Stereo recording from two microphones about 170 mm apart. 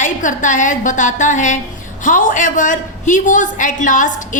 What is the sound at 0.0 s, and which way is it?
A woman's voice, 50° left (ahead or behind).